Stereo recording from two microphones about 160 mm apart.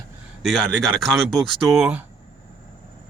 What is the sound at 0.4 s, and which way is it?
Speech, centre (ahead or behind).